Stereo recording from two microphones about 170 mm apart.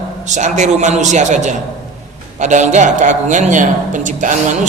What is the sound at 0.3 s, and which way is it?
Speech, 45° right (ahead or behind).